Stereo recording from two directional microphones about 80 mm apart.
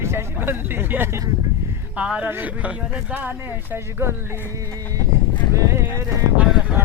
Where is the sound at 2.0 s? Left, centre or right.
Centre.